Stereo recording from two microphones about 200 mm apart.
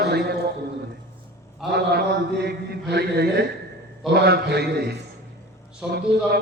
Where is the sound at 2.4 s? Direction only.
55° right (ahead or behind).